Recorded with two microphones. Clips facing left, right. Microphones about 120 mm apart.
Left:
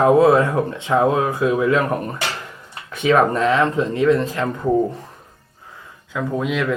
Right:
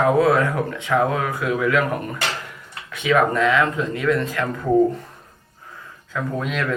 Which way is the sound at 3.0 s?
35° left (ahead or behind).